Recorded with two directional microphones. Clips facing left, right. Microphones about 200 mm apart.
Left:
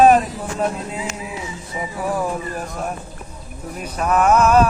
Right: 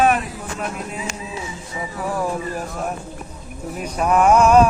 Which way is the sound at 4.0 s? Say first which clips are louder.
Right 1 dB; 10° right (ahead or behind).